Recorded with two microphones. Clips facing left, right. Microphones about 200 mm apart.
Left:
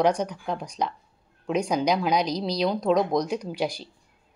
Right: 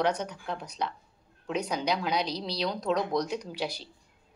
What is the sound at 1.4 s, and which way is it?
A woman's voice, 15° left (ahead or behind).